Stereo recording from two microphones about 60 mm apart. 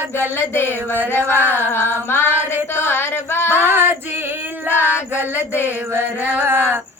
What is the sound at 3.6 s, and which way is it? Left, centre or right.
Female singing, right.